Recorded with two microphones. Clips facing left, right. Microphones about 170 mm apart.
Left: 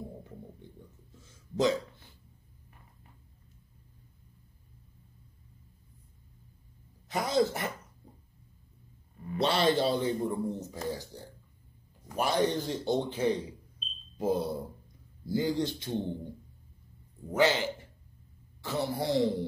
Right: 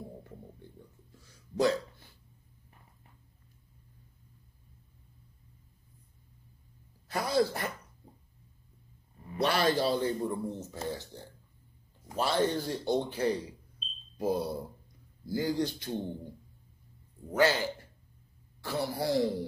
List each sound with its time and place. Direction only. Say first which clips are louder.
1.1 s a sound: even; 20° left (ahead or behind)
7.1 s speech: left 1 dB; 20° left (ahead or behind)
9.4 s a man's voice: left 1 dB; 25° left (ahead or behind)
12.2 s speech: left 1 dB; 15° left (ahead or behind)
17.3 s speech: even; 20° left (ahead or behind)